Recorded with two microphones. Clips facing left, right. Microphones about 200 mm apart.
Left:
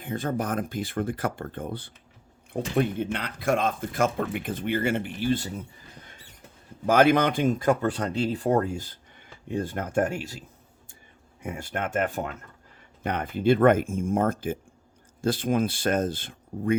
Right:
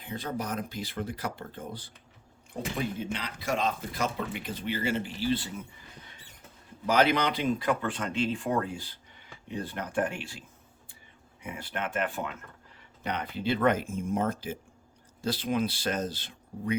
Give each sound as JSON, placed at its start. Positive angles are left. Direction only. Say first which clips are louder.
{"t": 0.0, "sound": "speech", "louder": "left 6 dB", "side_deg": 50}
{"t": 6.8, "sound": "speech", "louder": "left 5 dB", "side_deg": 50}
{"t": 11.4, "sound": "speech", "louder": "left 4 dB", "side_deg": 45}